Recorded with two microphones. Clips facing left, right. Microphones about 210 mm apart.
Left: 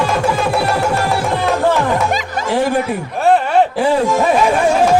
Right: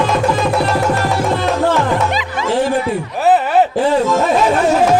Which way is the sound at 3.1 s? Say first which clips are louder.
Even; centre (ahead or behind).